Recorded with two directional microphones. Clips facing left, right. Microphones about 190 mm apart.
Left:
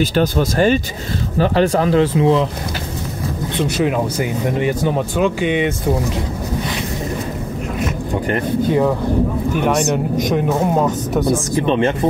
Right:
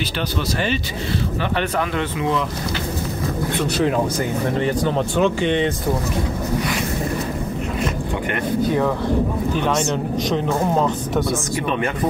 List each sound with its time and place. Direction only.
0.0 s speech: 45° left (ahead or behind)
1.4 s speech: 35° left (ahead or behind)
3.6 s speech: 10° left (ahead or behind)
9.5 s speech: 15° left (ahead or behind)
11.6 s speech: 30° left (ahead or behind)